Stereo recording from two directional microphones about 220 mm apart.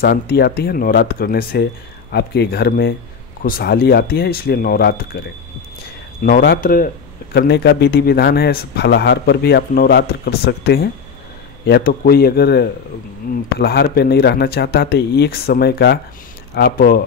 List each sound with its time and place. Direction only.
0.0 s a man's voice: 45° left (ahead or behind)
6.2 s a man's voice: 45° left (ahead or behind)